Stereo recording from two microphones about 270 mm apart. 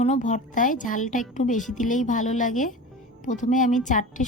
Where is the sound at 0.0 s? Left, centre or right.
Left.